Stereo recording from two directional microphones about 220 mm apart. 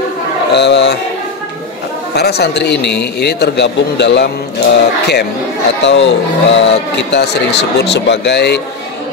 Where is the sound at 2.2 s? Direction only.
50° left (ahead or behind).